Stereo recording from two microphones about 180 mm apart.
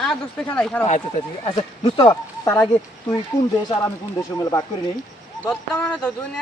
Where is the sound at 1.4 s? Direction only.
30° left (ahead or behind).